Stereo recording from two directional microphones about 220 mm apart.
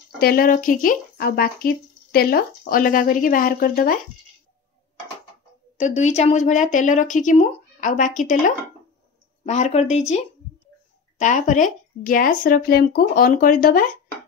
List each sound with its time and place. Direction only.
0.2 s speech: 40° left (ahead or behind)
5.8 s speech: 30° left (ahead or behind)